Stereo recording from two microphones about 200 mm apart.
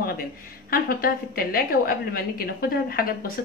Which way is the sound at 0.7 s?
45° left (ahead or behind).